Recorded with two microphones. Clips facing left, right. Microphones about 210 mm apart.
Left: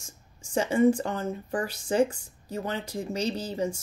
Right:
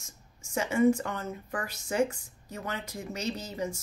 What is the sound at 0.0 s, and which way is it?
A woman's voice, 30° left (ahead or behind).